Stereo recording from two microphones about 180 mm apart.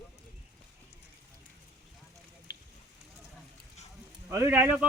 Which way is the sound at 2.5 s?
65° left (ahead or behind).